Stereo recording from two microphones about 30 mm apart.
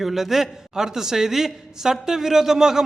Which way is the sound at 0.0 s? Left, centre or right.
Centre.